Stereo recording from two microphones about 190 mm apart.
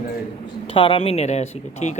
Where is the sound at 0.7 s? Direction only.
30° left (ahead or behind).